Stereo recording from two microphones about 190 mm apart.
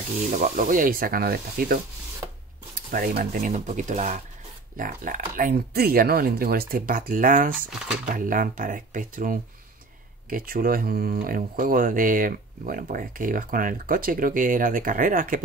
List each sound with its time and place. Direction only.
0.3 s speech: 40° right (ahead or behind)